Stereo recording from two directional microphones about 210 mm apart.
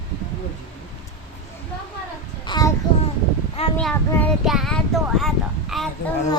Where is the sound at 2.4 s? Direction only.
20° left (ahead or behind).